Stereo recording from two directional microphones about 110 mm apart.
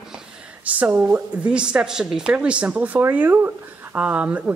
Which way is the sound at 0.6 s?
15° right (ahead or behind).